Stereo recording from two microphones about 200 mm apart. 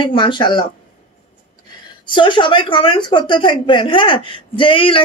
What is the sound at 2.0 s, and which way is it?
Speech, 25° left (ahead or behind).